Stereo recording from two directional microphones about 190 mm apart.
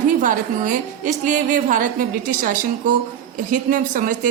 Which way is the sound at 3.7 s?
45° right (ahead or behind).